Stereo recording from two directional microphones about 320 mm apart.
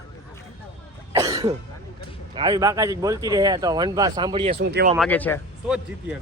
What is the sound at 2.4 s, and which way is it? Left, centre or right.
Speech, centre.